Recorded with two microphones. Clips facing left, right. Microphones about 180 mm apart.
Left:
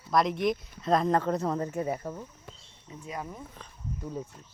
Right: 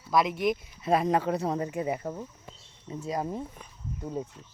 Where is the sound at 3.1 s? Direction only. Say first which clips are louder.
Right 7 dB; 35° right (ahead or behind).